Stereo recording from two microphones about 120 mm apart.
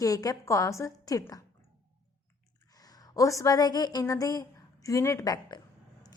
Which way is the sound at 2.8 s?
30° left (ahead or behind).